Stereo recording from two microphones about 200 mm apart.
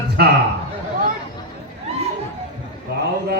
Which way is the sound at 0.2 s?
50° right (ahead or behind).